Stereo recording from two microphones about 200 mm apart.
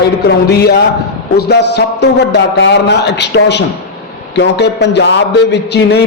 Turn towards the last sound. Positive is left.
turn(degrees=55)  # may be behind; listen again after turning